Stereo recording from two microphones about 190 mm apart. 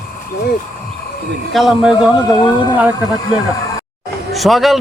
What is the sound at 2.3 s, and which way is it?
Speech, 25° left (ahead or behind).